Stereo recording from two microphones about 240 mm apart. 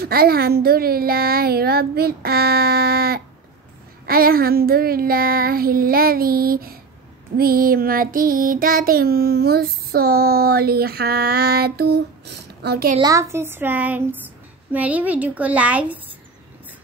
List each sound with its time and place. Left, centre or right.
0.0 s child singing: right
12.9 s a woman's voice: centre